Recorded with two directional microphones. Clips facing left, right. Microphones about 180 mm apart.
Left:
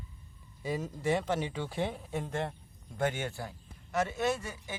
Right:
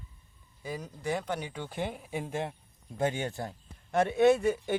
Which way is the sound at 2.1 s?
15° right (ahead or behind).